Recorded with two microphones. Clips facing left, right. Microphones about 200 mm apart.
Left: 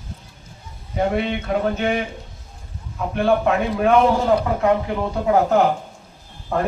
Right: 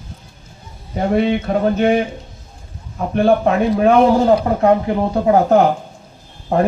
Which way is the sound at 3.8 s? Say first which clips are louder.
Right 4 dB; 35° right (ahead or behind).